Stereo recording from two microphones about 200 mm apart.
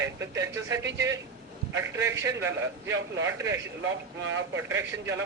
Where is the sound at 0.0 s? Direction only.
15° right (ahead or behind).